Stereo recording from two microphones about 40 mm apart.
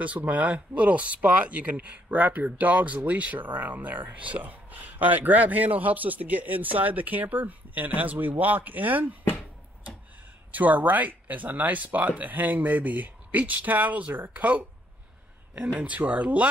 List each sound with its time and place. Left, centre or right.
0.0 s speech: right
10.5 s speech: right
15.5 s speech: right